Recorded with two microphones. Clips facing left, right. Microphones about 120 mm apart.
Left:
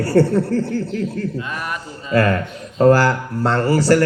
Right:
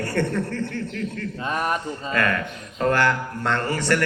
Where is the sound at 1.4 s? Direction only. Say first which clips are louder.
Right 2 dB; 35° right (ahead or behind).